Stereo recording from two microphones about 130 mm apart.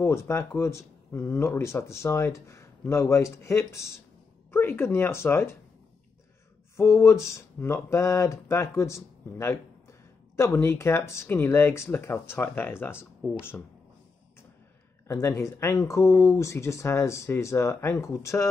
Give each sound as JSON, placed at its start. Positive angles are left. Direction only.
{"t": 0.0, "sound": "speech", "side_deg": 20}
{"t": 6.8, "sound": "speech", "side_deg": 20}
{"t": 15.0, "sound": "speech", "side_deg": 20}